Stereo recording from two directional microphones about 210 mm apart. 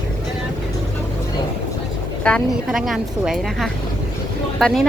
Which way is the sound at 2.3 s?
Centre (ahead or behind).